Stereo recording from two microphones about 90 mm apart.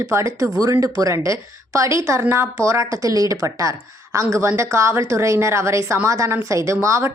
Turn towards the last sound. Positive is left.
turn(degrees=-35)  # may be behind; listen again after turning